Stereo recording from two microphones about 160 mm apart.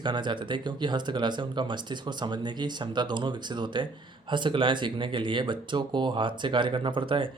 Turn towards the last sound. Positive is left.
turn(degrees=-35)  # may be behind; listen again after turning